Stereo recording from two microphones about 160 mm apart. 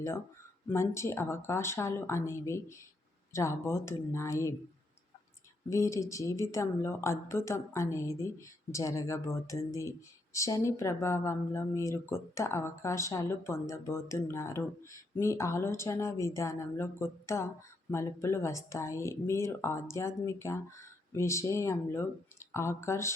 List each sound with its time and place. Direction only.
0.7 s speech: 15° left (ahead or behind)
5.6 s a woman's voice: 20° left (ahead or behind)